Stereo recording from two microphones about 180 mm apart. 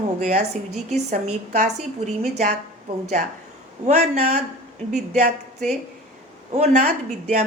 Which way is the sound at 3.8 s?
40° right (ahead or behind).